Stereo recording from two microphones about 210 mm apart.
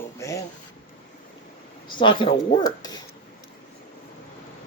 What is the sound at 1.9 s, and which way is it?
Speech, 25° left (ahead or behind).